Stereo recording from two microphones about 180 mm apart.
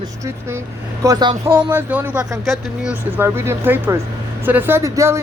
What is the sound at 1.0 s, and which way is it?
Speech, 25° right (ahead or behind).